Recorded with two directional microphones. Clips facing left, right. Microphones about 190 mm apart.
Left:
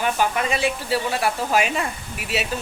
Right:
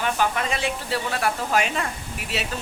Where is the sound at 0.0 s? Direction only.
10° left (ahead or behind).